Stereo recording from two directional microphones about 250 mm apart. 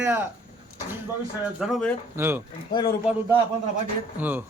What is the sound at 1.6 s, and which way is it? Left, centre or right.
Speech, centre.